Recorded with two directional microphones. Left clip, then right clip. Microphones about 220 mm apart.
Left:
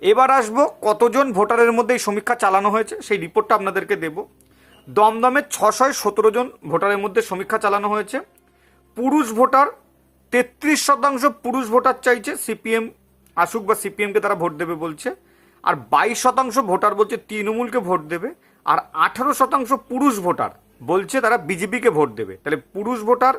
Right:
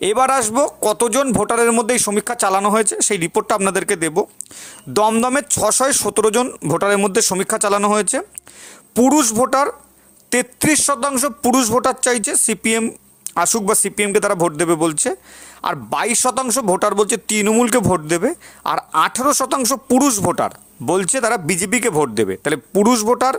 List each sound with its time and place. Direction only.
0.0 s speech: 40° right (ahead or behind)